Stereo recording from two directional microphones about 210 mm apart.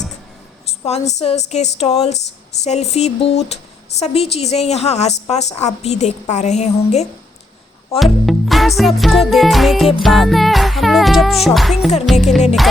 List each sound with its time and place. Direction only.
0.9 s a woman's voice: 30° left (ahead or behind)
7.9 s music: centre (ahead or behind)